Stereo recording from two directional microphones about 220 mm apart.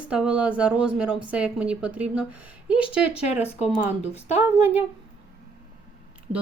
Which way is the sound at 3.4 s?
25° left (ahead or behind).